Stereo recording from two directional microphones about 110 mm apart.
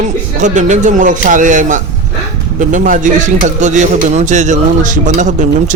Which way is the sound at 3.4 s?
90° right.